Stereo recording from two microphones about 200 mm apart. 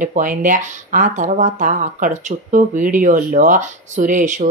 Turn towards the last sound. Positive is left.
turn(degrees=-40)  # may be behind; listen again after turning